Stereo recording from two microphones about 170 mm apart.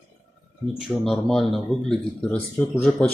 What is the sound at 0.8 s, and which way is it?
Speech, centre (ahead or behind).